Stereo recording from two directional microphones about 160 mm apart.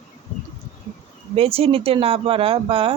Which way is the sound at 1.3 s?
40° right (ahead or behind).